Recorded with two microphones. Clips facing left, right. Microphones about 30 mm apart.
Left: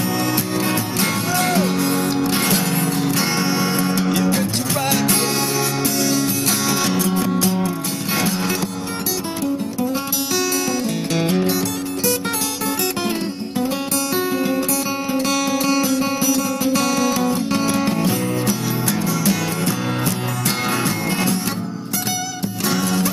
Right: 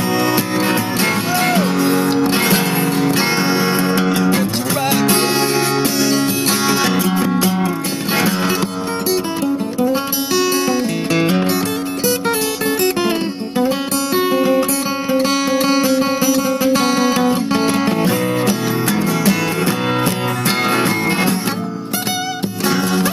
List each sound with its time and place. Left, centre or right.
0.2 s music: right
4.4 s music: centre
5.9 s music: right
11.1 s music: right
14.1 s music: right
18.0 s music: right
22.7 s music: right